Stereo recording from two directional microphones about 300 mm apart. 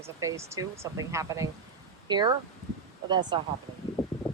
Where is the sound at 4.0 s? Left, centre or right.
Centre.